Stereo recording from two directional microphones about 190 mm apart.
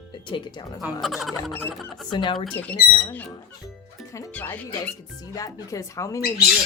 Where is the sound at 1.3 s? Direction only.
10° left (ahead or behind).